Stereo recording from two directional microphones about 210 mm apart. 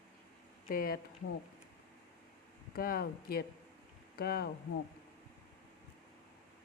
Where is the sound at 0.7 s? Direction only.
45° left (ahead or behind).